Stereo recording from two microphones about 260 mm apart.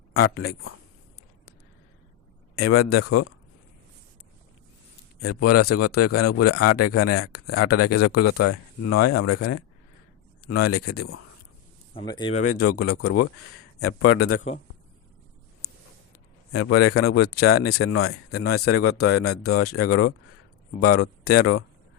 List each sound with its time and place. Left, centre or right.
0.1 s speech: left
2.6 s speech: left
5.2 s speech: left
11.9 s speech: centre
12.4 s speech: left
16.5 s speech: left